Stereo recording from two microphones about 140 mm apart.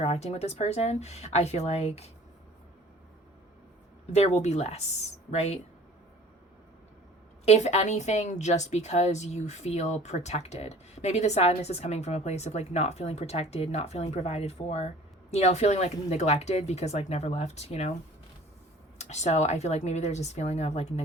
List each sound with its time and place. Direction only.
0.0 s a woman's voice: 50° left (ahead or behind)
4.1 s a woman's voice: 50° left (ahead or behind)
7.4 s a woman's voice: 55° left (ahead or behind)
18.9 s a woman's voice: 55° left (ahead or behind)